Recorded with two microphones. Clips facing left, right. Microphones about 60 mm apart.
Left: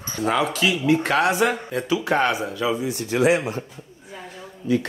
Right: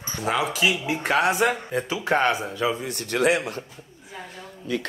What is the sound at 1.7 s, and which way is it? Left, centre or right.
Speech, right.